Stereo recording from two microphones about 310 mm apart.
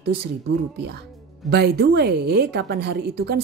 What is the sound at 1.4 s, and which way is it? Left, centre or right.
A woman's voice, right.